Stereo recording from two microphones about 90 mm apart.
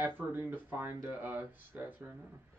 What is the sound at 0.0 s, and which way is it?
Speech, 20° right (ahead or behind).